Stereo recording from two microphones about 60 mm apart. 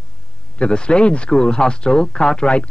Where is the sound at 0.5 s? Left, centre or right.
Centre.